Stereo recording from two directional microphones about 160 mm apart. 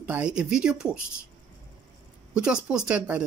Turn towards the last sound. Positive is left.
turn(degrees=-10)  # may be behind; listen again after turning